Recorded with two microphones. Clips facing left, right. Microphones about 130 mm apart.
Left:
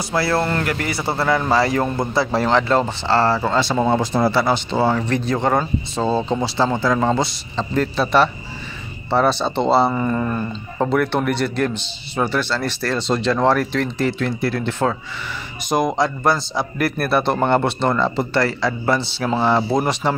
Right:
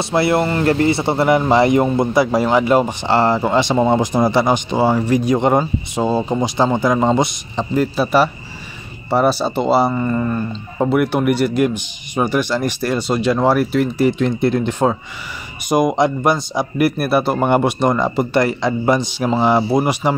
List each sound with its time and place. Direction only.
0.0 s speech: 20° right (ahead or behind)